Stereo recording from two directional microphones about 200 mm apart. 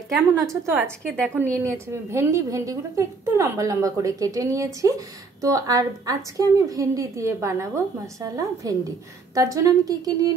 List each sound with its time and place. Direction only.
0.3 s a woman's voice: 15° right (ahead or behind)
1.0 s a woman's voice: 5° left (ahead or behind)
1.6 s a woman's voice: 15° right (ahead or behind)